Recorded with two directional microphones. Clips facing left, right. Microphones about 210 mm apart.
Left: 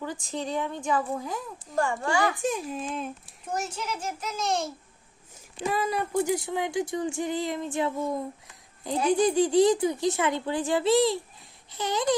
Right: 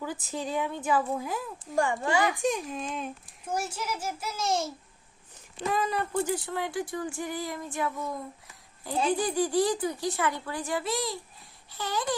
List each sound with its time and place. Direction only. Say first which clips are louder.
0.0 s a woman's voice: left 1 dB; 5° right (ahead or behind)
2.4 s a woman's voice: even; 5° left (ahead or behind)
5.6 s speech: left 1 dB; 10° left (ahead or behind); by 8.1 s 25° left (ahead or behind)
9.1 s speech: left 8 dB; 20° left (ahead or behind)